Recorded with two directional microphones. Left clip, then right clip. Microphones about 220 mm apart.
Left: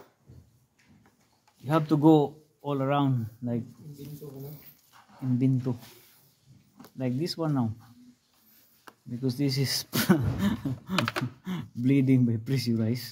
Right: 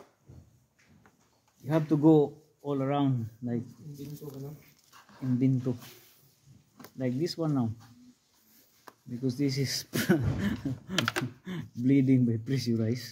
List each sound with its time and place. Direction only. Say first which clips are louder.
1.7 s speech: left 2 dB; 40° left (ahead or behind)
5.4 s speech: even; 25° left (ahead or behind)
7.0 s speech: left 1 dB; 25° left (ahead or behind)
9.2 s speech: left 1 dB; 30° left (ahead or behind)